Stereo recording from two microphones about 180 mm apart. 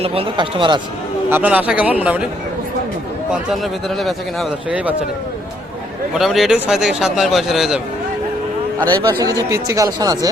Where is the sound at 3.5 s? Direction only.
Centre (ahead or behind).